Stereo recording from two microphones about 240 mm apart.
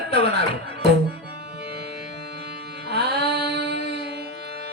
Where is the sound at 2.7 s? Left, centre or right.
Right.